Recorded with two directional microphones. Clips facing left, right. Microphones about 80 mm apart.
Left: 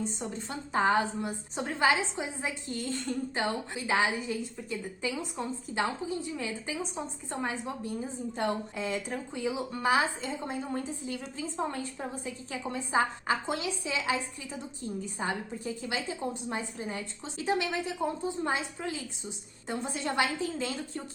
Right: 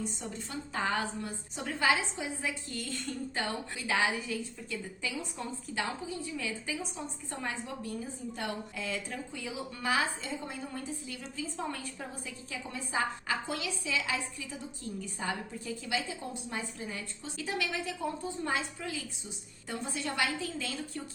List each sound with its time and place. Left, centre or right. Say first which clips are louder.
0.0 s a woman's voice: left 3 dB; left
15.2 s a woman's voice: left 3 dB; left